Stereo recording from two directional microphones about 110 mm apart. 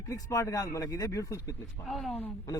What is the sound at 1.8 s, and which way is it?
Speech, centre (ahead or behind).